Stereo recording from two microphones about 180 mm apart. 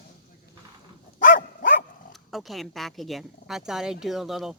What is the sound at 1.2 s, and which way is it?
Dog, 50° left (ahead or behind).